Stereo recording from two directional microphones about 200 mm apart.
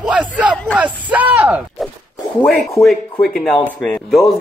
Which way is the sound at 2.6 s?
Centre (ahead or behind).